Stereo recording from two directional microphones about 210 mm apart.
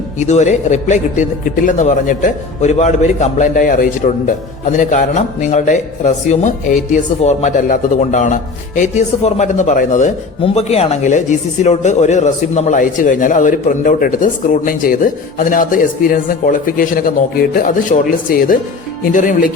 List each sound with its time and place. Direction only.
0.2 s a man's voice: 35° left (ahead or behind)